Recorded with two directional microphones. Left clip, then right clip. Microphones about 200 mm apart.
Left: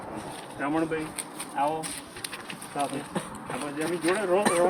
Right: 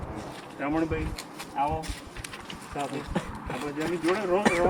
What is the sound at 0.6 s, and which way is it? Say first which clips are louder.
Speech: left 1 dB; 5° right (ahead or behind).